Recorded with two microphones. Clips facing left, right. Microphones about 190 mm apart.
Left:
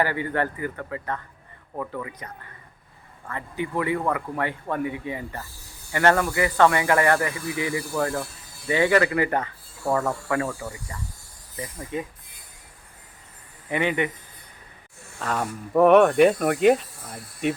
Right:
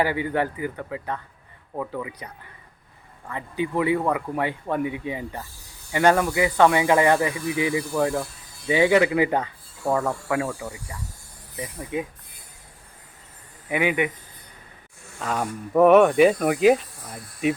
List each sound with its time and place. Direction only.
0.0 s speech: 15° right (ahead or behind)
10.0 s speech: centre (ahead or behind)
13.7 s speech: 10° right (ahead or behind)
15.2 s speech: centre (ahead or behind)